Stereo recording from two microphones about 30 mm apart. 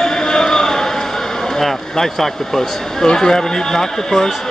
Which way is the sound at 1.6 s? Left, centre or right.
Centre.